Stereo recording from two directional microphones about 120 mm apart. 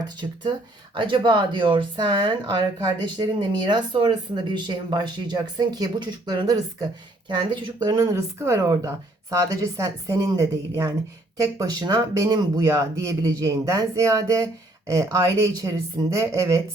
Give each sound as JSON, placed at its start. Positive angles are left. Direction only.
{"t": 0.2, "sound": "speech", "side_deg": -30}
{"t": 0.9, "sound": "speech", "side_deg": -40}